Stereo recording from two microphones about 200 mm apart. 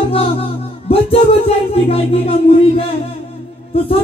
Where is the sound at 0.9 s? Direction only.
30° left (ahead or behind).